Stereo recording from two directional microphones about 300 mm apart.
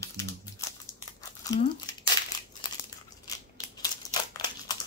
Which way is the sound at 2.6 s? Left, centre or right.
Centre.